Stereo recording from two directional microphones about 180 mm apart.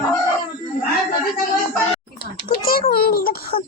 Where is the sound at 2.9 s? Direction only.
55° left (ahead or behind).